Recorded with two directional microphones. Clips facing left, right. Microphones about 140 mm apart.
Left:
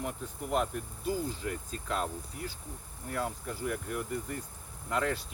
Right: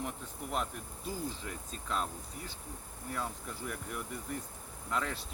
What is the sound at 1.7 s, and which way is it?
Speech, 55° left (ahead or behind).